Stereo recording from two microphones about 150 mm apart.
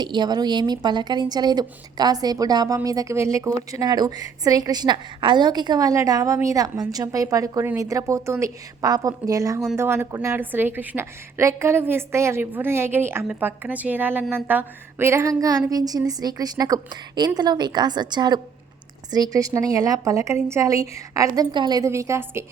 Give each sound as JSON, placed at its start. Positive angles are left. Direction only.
{"t": 0.0, "sound": "a woman's voice", "side_deg": -30}